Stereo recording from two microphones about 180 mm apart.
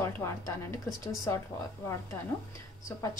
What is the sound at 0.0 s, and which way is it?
A woman's voice, 15° left (ahead or behind).